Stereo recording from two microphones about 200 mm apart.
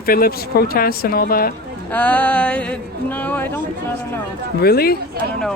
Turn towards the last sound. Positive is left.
turn(degrees=50)  # may be behind; listen again after turning